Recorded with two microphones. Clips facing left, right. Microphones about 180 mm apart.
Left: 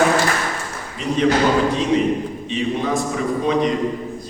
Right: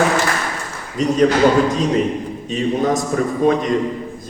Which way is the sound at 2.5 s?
45° right (ahead or behind).